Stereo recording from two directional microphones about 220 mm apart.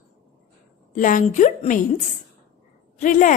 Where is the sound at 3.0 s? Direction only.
35° left (ahead or behind).